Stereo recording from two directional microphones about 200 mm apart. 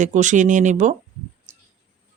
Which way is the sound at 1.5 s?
35° right (ahead or behind).